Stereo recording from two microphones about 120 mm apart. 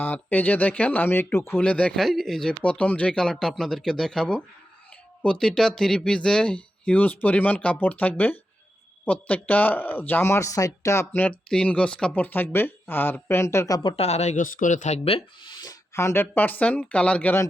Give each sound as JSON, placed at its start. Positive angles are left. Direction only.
{"t": 0.0, "sound": "speech", "side_deg": 15}
{"t": 13.9, "sound": "speech", "side_deg": 60}